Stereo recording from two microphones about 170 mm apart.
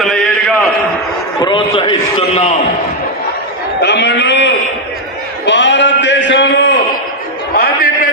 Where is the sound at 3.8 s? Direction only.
90° left.